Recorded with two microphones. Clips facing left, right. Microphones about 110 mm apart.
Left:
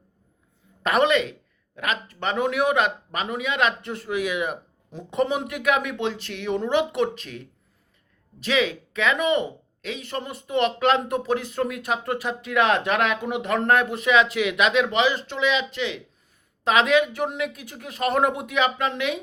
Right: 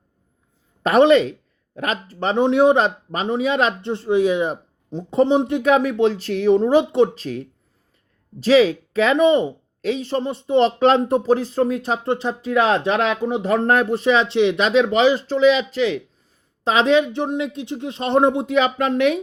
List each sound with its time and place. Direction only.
0.8 s speech: 35° right (ahead or behind)